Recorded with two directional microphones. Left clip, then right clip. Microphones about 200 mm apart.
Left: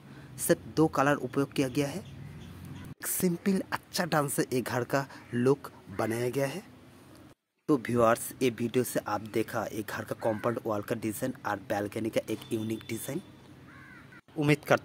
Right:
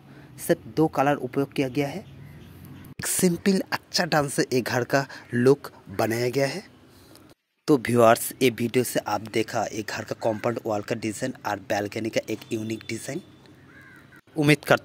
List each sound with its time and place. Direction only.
0.4 s speech: 10° right (ahead or behind)
3.0 s speech: 25° right (ahead or behind)
7.6 s speech: 25° right (ahead or behind); by 13.2 s 5° right (ahead or behind)
14.3 s speech: 25° right (ahead or behind)